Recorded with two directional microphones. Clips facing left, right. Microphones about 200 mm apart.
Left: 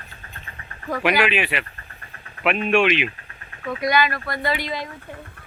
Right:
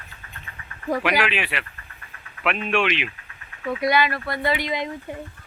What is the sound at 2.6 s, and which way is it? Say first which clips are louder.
Speech: left 5 dB; 5° left (ahead or behind).